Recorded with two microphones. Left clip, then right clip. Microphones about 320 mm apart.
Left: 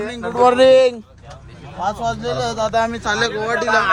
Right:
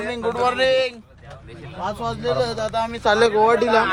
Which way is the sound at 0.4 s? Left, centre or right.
Left.